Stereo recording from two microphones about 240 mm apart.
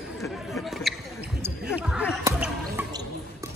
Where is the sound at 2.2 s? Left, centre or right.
Centre.